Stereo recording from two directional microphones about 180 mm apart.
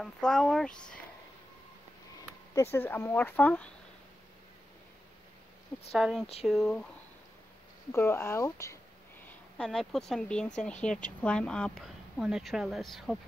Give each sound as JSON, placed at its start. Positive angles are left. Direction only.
{"t": 0.0, "sound": "a woman's voice", "side_deg": 5}
{"t": 2.5, "sound": "speech", "side_deg": 15}
{"t": 5.9, "sound": "a woman's voice", "side_deg": 0}
{"t": 7.9, "sound": "speech", "side_deg": 15}
{"t": 9.3, "sound": "a woman's voice", "side_deg": 0}